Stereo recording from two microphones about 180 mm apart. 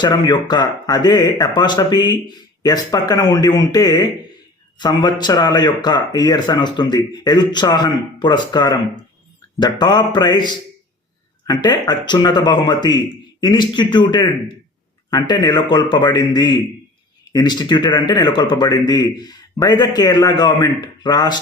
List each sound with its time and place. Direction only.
0.0 s speech: 25° left (ahead or behind)